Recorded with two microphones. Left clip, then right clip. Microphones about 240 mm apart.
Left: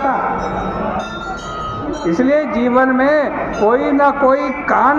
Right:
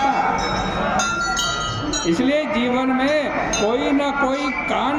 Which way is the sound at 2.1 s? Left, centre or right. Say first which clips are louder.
Left 6 dB; right.